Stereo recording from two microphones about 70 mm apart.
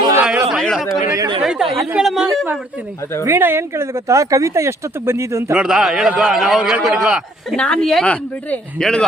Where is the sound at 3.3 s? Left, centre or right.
Right.